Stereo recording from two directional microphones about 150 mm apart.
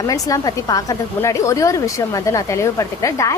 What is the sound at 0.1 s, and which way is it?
A woman's voice, 25° left (ahead or behind).